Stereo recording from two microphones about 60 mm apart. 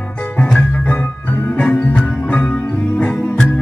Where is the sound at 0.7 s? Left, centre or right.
Left.